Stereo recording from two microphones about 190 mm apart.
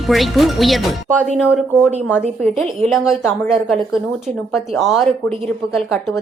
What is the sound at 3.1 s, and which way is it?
Speech, centre (ahead or behind).